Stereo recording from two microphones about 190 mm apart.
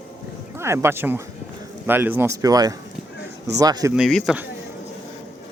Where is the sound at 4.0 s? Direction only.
Centre (ahead or behind).